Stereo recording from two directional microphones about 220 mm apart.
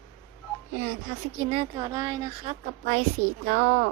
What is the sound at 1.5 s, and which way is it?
Speech, 20° right (ahead or behind).